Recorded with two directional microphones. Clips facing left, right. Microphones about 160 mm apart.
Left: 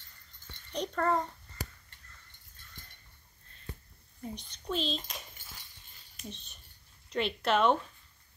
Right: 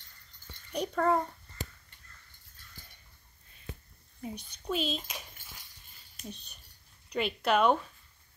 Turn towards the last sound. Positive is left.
turn(degrees=0)  # may be behind; listen again after turning